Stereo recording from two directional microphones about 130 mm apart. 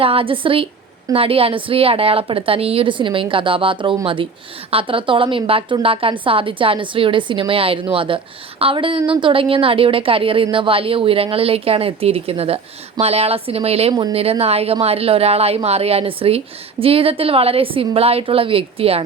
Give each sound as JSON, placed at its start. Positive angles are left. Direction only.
{"t": 0.0, "sound": "a woman's voice", "side_deg": -45}